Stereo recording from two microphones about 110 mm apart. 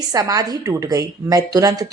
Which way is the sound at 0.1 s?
35° right (ahead or behind).